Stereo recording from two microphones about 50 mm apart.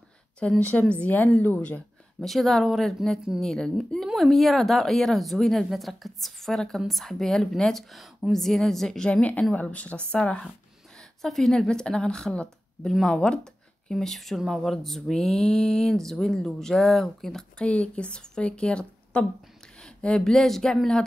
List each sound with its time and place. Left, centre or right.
0.4 s a woman's voice: left
2.2 s a woman's voice: centre; by 10.4 s left
11.2 s speech: centre
17.6 s a woman's voice: left